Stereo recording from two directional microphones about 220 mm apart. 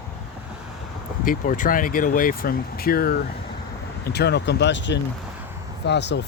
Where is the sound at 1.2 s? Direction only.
40° left (ahead or behind).